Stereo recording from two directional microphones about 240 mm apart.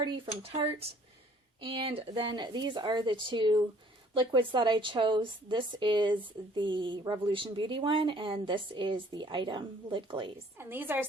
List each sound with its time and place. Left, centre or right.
0.0 s speech: right
10.6 s a woman's voice: centre